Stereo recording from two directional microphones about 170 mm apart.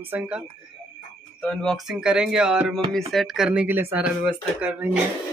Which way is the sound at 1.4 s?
5° left (ahead or behind).